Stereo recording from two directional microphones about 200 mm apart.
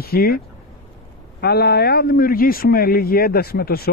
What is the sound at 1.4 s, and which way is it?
A man's voice, 55° left (ahead or behind).